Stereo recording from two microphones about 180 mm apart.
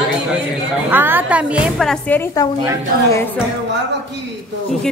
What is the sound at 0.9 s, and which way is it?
A woman's voice, 10° right (ahead or behind).